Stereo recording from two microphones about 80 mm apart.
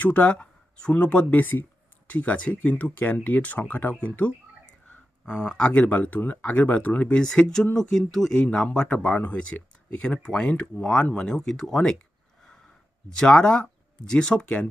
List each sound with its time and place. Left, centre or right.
0.0 s speech: centre
13.1 s speech: centre